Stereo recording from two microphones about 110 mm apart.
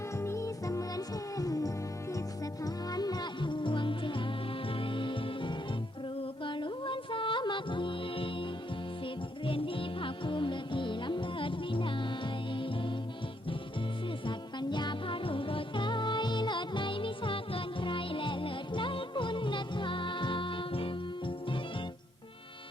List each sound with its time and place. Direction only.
0.2 s music: 25° left (ahead or behind); by 8.4 s 50° left (ahead or behind)
9.5 s music: 55° left (ahead or behind)
14.3 s music: 45° left (ahead or behind)